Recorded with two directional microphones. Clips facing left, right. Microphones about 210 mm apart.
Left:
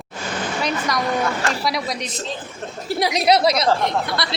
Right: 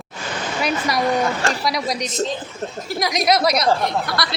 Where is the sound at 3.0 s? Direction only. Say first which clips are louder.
Left 1 dB; 30° left (ahead or behind).